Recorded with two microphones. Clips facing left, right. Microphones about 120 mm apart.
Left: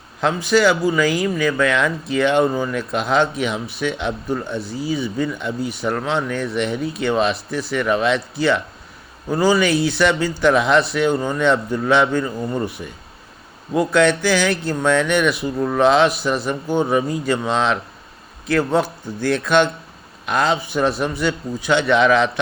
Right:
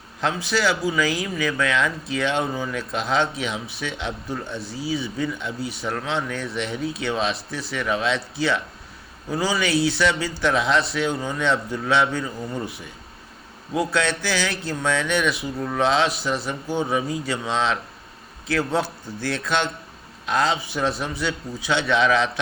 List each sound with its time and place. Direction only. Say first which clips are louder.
0.2 s a man's voice: left 7 dB; 50° left (ahead or behind)